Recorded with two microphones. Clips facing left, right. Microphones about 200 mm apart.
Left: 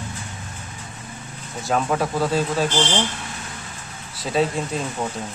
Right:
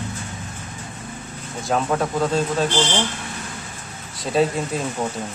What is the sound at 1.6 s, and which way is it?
Speech, centre (ahead or behind).